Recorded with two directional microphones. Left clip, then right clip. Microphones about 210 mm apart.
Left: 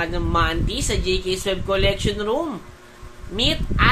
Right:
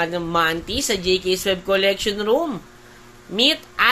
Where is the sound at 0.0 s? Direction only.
25° right (ahead or behind).